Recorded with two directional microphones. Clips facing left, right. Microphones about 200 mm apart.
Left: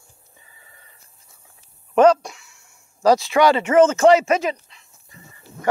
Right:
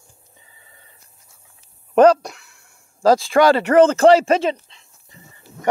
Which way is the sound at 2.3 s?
60° right (ahead or behind).